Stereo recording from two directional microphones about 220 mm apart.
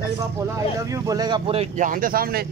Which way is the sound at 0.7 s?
15° right (ahead or behind).